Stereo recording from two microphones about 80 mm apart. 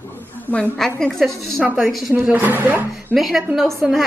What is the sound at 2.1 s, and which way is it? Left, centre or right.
Speech, right.